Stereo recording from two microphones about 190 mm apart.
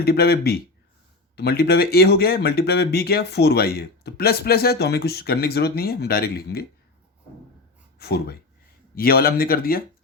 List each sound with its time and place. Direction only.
0.0 s speech: 55° left (ahead or behind)
7.9 s speech: 55° left (ahead or behind)